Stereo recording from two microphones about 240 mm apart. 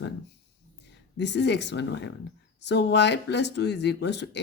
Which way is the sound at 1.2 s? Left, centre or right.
Left.